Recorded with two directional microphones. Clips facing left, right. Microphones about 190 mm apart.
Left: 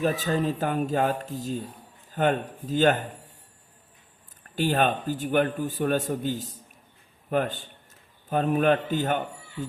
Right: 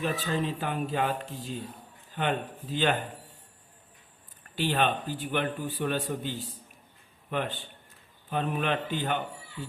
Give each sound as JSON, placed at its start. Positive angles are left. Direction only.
{"t": 0.0, "sound": "a man's voice", "side_deg": 45}
{"t": 4.5, "sound": "a man's voice", "side_deg": 45}